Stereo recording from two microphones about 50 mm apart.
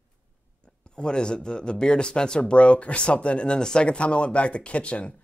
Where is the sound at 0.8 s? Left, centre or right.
Centre.